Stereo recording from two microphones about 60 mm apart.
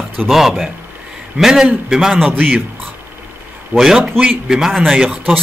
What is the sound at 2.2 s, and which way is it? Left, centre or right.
Speech, right.